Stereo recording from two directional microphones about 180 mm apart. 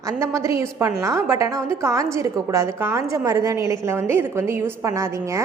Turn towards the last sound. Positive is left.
turn(degrees=-15)  # may be behind; listen again after turning